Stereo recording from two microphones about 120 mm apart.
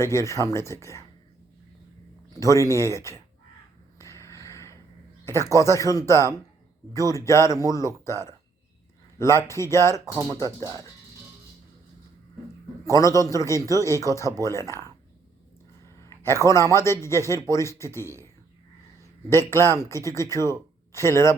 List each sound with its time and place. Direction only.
0.0 s a man's voice: 25° left (ahead or behind)
2.3 s a man's voice: 25° left (ahead or behind)
3.9 s a sound: 25° left (ahead or behind)
5.2 s a man's voice: 25° left (ahead or behind)
12.8 s a man's voice: 25° left (ahead or behind)
16.0 s a man's voice: 25° left (ahead or behind)
19.3 s a man's voice: 20° left (ahead or behind)